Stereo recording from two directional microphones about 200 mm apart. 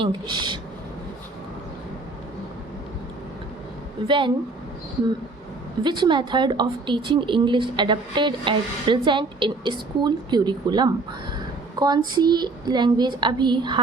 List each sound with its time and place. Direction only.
0.0 s a woman's voice: 25° right (ahead or behind)
4.0 s a woman's voice: 25° right (ahead or behind)
5.8 s a woman's voice: 20° right (ahead or behind)